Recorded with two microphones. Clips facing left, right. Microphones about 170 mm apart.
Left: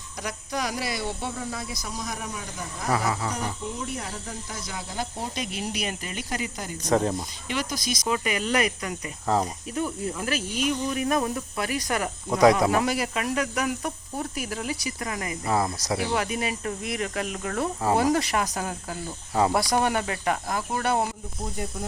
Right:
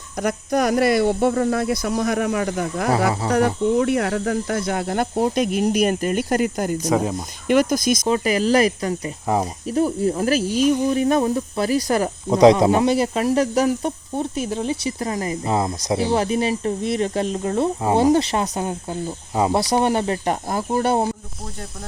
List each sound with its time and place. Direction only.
0.2 s speech: 50° right (ahead or behind)
6.9 s speech: 10° right (ahead or behind)
7.4 s speech: 50° right (ahead or behind)
8.0 s speech: 35° right (ahead or behind)
9.2 s speech: 15° right (ahead or behind)
9.6 s speech: 35° right (ahead or behind)